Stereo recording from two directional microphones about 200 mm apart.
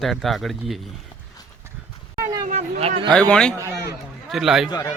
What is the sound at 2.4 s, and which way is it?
Speech, 35° right (ahead or behind).